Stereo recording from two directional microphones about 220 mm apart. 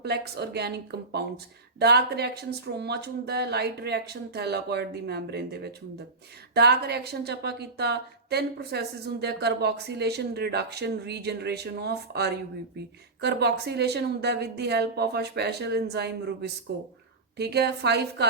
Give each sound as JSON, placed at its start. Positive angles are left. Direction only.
{"t": 0.0, "sound": "a woman's voice", "side_deg": -50}